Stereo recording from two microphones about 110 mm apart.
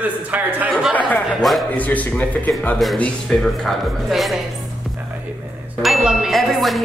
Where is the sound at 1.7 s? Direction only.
15° left (ahead or behind).